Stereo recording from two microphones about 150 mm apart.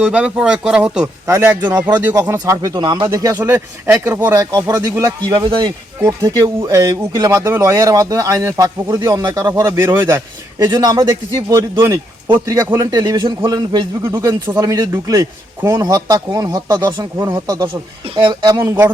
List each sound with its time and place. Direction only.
0.0 s speech: 10° right (ahead or behind)
1.0 s a man's voice: 15° right (ahead or behind)
18.2 s speech: 30° right (ahead or behind)